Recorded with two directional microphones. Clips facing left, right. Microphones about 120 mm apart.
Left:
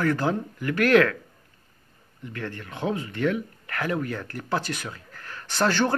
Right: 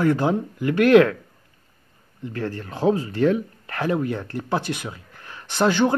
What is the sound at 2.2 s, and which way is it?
Speech, 35° right (ahead or behind).